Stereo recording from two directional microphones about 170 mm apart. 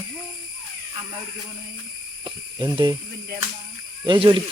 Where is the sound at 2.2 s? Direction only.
25° right (ahead or behind).